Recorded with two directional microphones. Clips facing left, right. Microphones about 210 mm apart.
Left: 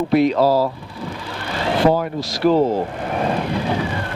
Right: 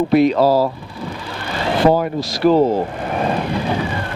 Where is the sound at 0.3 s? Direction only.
35° right (ahead or behind).